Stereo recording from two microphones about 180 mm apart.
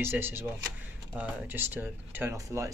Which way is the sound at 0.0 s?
10° right (ahead or behind).